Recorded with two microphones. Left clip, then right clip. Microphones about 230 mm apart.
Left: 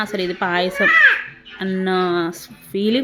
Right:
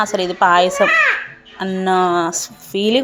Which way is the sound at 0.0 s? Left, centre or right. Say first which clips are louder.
Right 7 dB; centre.